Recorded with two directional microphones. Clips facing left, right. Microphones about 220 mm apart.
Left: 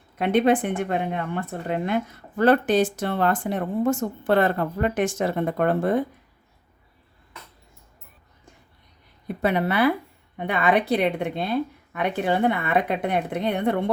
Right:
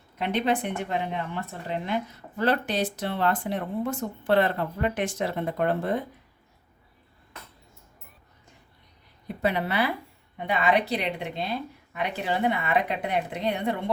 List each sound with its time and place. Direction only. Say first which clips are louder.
0.2 s a woman's voice: left 6 dB; 50° left (ahead or behind)
9.2 s a woman's voice: left 4 dB; 50° left (ahead or behind)